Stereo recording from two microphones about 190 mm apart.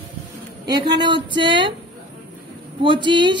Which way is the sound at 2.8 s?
25° right (ahead or behind).